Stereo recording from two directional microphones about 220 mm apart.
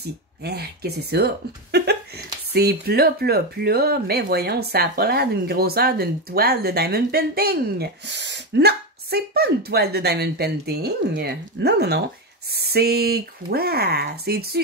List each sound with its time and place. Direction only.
0.0 s speech: 45° right (ahead or behind)